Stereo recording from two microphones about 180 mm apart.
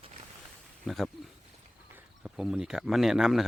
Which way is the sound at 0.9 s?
Centre (ahead or behind).